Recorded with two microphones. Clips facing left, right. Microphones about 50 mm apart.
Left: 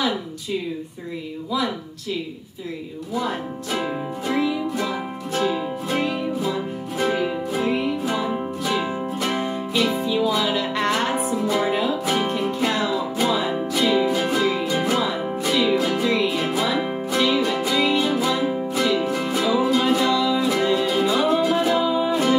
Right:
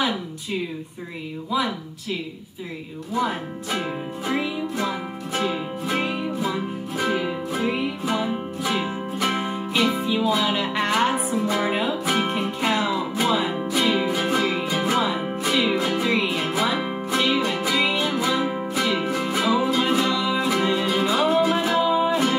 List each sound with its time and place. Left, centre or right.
4.3 s music: right
5.9 s music: centre
7.0 s music: centre
8.6 s music: centre
20.2 s music: centre